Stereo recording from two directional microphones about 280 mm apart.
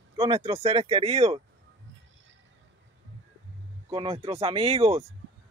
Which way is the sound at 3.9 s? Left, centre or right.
Centre.